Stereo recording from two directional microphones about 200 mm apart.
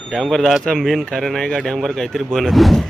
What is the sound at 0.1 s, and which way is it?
Speech, centre (ahead or behind).